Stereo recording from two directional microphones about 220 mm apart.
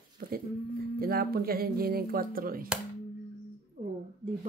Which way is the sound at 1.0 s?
40° right (ahead or behind).